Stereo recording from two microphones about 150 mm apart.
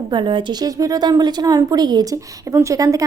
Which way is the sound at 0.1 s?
30° right (ahead or behind).